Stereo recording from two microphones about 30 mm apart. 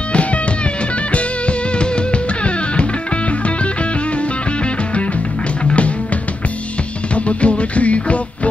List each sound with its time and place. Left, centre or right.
7.2 s music: left